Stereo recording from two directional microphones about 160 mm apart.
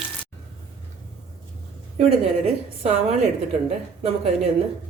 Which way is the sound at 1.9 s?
40° right (ahead or behind).